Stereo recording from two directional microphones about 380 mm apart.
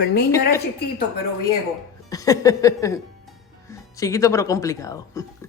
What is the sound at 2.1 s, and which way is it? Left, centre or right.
Music, centre.